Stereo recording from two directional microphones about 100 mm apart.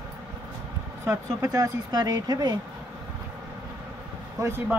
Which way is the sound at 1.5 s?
40° right (ahead or behind).